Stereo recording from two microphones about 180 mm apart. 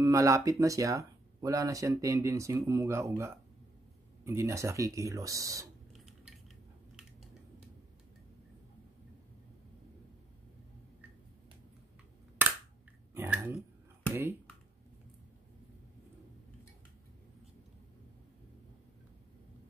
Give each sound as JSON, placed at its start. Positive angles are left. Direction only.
{"t": 0.0, "sound": "speech", "side_deg": -15}
{"t": 5.9, "sound": "cutlery", "side_deg": 0}
{"t": 13.1, "sound": "chewing", "side_deg": -10}